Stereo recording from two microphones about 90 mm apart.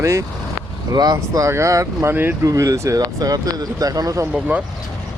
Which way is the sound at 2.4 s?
35° right (ahead or behind).